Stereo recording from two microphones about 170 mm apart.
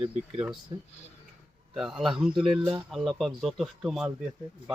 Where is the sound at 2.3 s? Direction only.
30° right (ahead or behind).